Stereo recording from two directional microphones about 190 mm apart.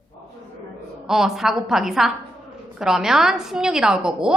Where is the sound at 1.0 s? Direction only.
Centre (ahead or behind).